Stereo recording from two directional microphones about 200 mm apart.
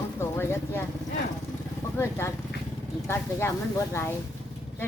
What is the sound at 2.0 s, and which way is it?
Vehicle, 10° left (ahead or behind).